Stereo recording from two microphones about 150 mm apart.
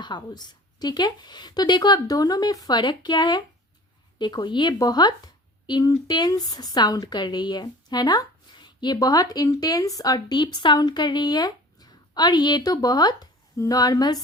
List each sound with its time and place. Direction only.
0.0 s speech: 30° left (ahead or behind)